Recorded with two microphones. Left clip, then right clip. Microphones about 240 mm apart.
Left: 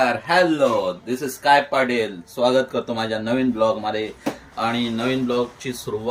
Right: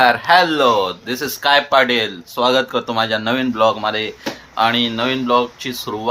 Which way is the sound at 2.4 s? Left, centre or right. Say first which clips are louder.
Right 3 dB; centre.